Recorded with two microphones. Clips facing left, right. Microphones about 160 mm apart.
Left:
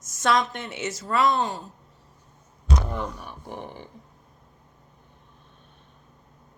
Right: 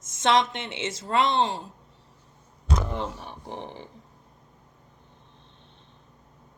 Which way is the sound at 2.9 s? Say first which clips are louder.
Even; 25° right (ahead or behind).